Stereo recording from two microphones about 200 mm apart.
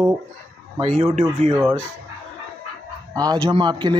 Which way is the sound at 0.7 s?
30° right (ahead or behind).